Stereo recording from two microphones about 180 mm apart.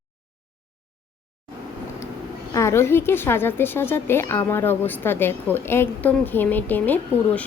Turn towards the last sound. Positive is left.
turn(degrees=10)  # may be behind; listen again after turning